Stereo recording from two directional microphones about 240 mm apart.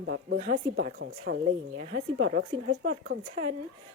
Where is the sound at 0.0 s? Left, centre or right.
Right.